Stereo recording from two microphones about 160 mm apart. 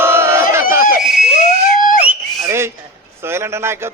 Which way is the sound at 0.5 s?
15° right (ahead or behind).